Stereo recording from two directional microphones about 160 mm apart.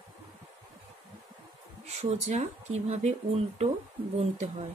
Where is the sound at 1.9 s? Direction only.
45° right (ahead or behind).